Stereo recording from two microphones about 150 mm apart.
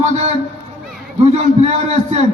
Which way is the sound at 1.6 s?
50° right (ahead or behind).